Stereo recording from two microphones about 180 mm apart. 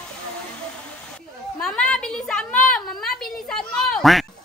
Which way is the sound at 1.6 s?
5° left (ahead or behind).